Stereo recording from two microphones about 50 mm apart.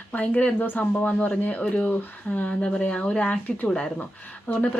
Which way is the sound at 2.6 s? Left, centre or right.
Left.